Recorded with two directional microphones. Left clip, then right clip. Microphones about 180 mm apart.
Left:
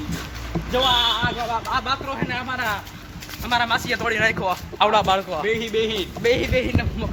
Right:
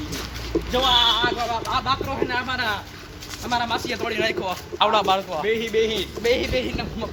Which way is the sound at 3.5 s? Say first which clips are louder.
Left 3 dB; 15° left (ahead or behind).